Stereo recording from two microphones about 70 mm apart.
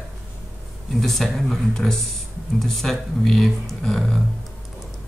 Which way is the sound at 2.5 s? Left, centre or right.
Centre.